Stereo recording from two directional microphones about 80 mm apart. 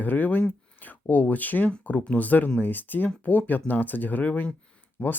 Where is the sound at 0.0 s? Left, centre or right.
Left.